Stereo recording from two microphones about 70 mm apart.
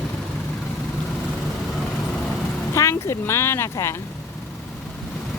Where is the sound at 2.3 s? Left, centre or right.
Left.